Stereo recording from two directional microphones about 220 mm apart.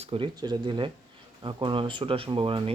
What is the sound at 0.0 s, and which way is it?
Speech, 25° right (ahead or behind).